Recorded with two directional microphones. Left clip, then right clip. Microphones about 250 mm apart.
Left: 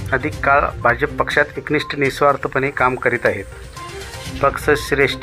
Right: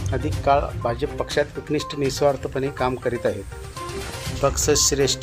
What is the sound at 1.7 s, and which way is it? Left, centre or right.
Speech, centre.